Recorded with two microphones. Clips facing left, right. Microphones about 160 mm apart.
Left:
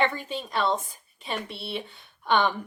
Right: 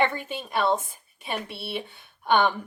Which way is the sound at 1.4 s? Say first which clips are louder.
Right 1 dB; 55° right (ahead or behind).